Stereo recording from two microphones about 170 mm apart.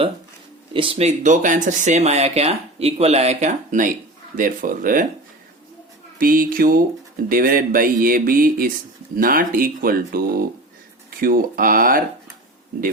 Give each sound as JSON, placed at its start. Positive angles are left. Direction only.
{"t": 0.7, "sound": "speech", "side_deg": -30}
{"t": 6.1, "sound": "speech", "side_deg": -55}